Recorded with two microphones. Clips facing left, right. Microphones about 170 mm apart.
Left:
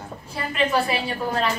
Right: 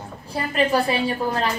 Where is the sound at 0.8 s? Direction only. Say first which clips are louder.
Right 3 dB; 30° right (ahead or behind).